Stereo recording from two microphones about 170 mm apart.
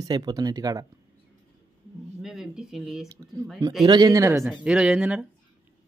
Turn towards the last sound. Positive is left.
turn(degrees=-5)  # may be behind; listen again after turning